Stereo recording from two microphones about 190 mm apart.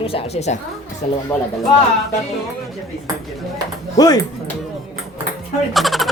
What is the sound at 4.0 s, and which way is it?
Speech, 20° left (ahead or behind).